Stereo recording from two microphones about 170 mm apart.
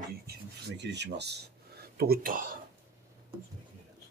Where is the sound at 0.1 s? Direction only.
70° right (ahead or behind); by 2.5 s 55° right (ahead or behind).